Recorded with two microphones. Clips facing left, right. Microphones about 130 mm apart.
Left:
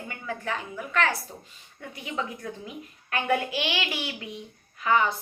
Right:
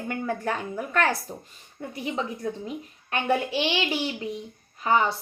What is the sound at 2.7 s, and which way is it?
A woman's voice, 30° right (ahead or behind).